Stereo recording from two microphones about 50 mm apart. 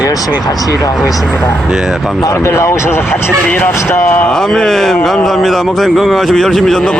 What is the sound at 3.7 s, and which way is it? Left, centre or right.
Speech, left.